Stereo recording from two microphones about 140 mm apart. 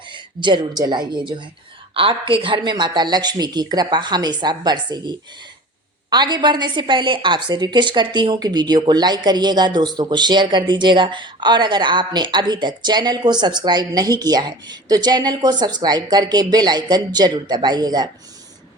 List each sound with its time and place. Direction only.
0.1 s a woman's voice: 35° right (ahead or behind)